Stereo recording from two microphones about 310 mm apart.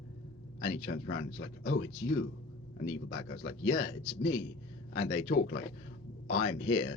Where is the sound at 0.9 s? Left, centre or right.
Left.